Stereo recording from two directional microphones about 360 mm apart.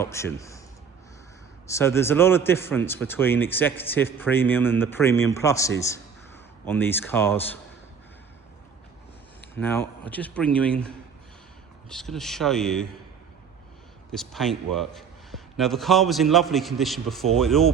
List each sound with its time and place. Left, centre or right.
0.0 s a man's voice: centre
1.6 s speech: centre
9.6 s speech: centre
14.1 s speech: centre